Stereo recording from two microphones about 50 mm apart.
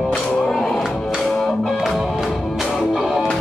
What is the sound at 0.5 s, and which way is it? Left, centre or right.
Music, centre.